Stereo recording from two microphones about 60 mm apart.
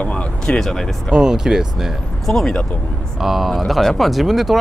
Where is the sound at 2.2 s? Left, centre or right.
Centre.